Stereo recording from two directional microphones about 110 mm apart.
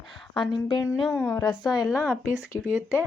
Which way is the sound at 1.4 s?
40° left (ahead or behind).